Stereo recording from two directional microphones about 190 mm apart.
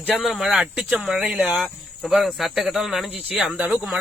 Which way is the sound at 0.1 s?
Centre (ahead or behind).